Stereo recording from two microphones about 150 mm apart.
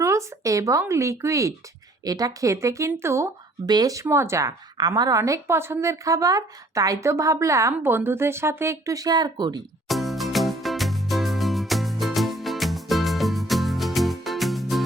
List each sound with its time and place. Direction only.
0.0 s speech: 20° right (ahead or behind)
9.9 s music: centre (ahead or behind)